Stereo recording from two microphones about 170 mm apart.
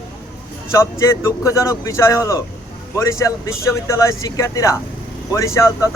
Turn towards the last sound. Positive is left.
turn(degrees=15)  # may be behind; listen again after turning